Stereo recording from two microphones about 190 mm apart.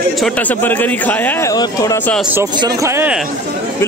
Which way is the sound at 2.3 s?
20° right (ahead or behind).